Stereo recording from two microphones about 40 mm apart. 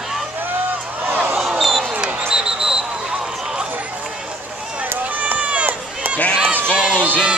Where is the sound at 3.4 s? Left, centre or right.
Centre.